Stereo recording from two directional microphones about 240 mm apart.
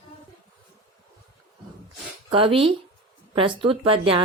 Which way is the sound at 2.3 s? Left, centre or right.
Right.